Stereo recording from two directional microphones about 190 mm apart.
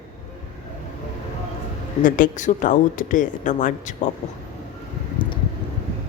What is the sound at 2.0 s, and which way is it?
Speech, 45° left (ahead or behind).